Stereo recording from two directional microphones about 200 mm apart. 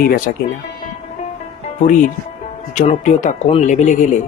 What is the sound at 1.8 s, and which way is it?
Speech, 40° left (ahead or behind).